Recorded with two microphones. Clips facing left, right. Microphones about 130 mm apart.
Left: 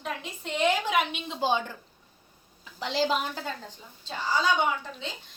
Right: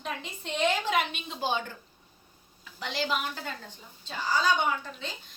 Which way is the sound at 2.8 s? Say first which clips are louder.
Left 4 dB; 30° left (ahead or behind).